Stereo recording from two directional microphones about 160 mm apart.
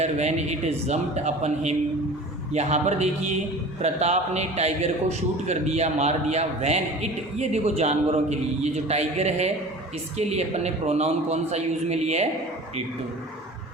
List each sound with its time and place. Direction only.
0.0 s a man's voice: 45° right (ahead or behind)